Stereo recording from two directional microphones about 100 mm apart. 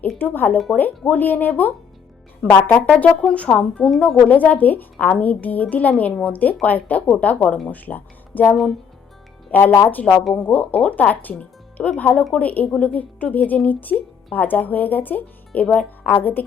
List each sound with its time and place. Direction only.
0.2 s speech: 20° left (ahead or behind)